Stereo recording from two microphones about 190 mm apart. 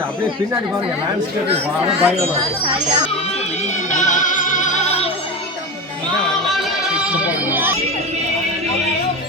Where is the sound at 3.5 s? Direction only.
40° left (ahead or behind).